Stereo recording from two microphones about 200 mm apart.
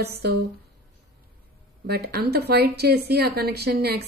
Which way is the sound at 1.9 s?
50° right (ahead or behind).